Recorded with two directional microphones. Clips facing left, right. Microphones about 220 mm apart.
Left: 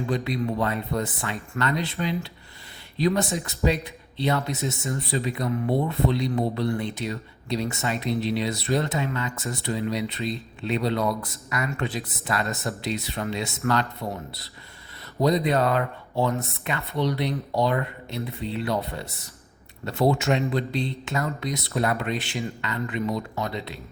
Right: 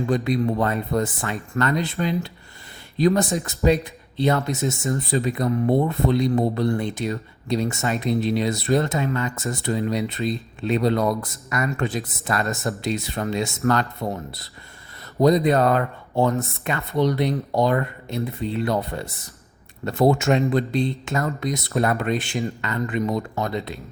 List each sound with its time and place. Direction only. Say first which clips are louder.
0.1 s speech: right 5 dB; 45° right (ahead or behind)
15.2 s speech: right 5 dB; 45° right (ahead or behind)